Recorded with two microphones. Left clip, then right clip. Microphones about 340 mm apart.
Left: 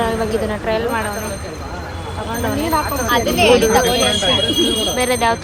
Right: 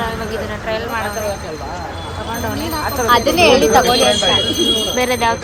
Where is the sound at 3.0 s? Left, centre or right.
Right.